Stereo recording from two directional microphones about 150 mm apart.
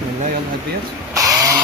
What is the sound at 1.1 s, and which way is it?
Printer, 20° right (ahead or behind).